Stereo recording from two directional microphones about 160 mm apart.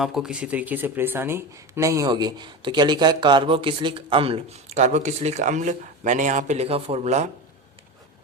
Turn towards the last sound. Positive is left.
turn(degrees=-45)  # may be behind; listen again after turning